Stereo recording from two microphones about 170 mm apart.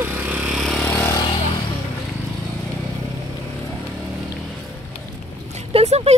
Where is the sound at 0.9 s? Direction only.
15° left (ahead or behind).